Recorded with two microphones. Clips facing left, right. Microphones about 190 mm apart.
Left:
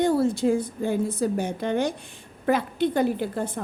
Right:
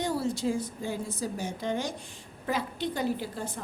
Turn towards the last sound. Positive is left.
turn(degrees=55)  # may be behind; listen again after turning